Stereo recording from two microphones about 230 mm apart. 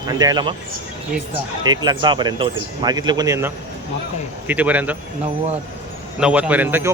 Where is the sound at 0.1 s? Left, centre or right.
Centre.